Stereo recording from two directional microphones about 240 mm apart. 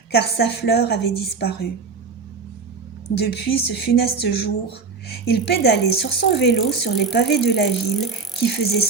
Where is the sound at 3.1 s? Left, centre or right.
Left.